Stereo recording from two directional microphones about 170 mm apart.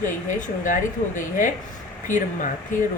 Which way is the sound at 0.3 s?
50° left (ahead or behind).